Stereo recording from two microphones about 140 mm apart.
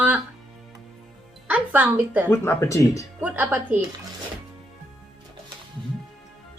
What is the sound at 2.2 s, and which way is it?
Speech, 20° left (ahead or behind).